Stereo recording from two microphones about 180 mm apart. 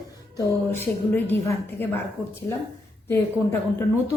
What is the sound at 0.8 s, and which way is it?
A woman's voice, 10° left (ahead or behind).